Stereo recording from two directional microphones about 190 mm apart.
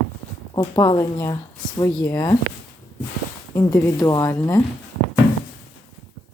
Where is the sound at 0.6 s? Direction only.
20° left (ahead or behind).